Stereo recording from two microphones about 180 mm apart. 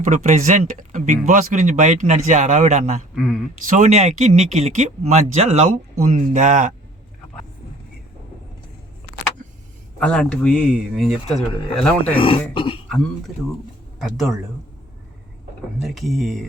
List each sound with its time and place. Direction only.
0.0 s speech: 45° right (ahead or behind)
3.2 s speech: centre (ahead or behind)
3.7 s speech: 45° right (ahead or behind)
10.0 s speech: 5° left (ahead or behind)
12.1 s speech: 30° left (ahead or behind)
14.0 s speech: centre (ahead or behind)
15.8 s speech: centre (ahead or behind)